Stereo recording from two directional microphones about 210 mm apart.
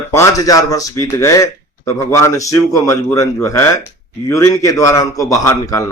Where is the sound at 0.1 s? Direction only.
15° left (ahead or behind).